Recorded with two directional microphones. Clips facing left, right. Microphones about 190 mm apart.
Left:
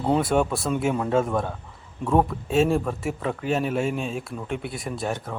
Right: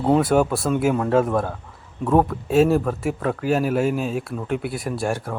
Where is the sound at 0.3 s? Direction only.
5° right (ahead or behind).